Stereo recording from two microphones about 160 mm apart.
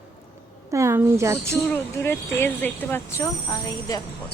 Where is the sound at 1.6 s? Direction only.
15° left (ahead or behind).